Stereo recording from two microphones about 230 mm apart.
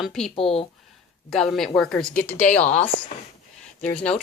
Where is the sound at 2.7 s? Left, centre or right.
Left.